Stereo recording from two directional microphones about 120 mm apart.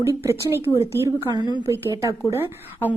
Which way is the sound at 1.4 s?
40° left (ahead or behind).